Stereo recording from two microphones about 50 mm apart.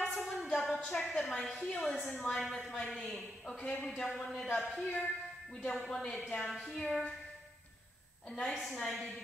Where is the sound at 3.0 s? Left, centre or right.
Centre.